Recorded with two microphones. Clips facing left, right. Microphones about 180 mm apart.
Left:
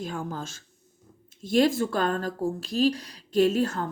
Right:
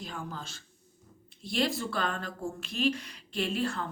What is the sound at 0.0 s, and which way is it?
A woman's voice, 45° left (ahead or behind).